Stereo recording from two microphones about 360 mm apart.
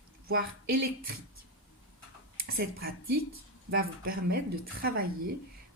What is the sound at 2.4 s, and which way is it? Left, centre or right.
A woman's voice, right.